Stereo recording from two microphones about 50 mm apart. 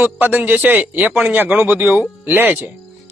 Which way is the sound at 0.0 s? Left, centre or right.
Right.